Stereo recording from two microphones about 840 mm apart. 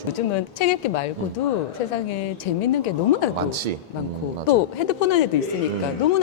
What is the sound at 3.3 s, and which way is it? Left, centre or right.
Speech, right.